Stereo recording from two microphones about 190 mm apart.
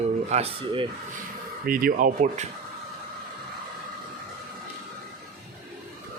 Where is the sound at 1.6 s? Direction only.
50° right (ahead or behind).